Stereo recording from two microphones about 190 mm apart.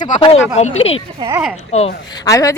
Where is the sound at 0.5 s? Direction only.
35° left (ahead or behind).